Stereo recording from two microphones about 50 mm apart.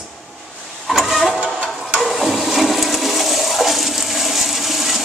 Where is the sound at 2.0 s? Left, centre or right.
Centre.